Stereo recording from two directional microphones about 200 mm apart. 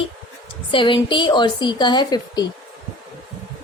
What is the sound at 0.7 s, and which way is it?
A woman's voice, 25° left (ahead or behind).